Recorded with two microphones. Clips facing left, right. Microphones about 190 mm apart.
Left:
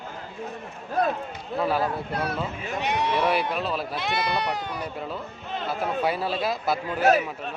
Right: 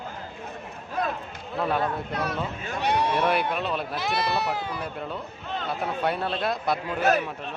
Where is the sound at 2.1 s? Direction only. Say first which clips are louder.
Left 1 dB; 30° left (ahead or behind).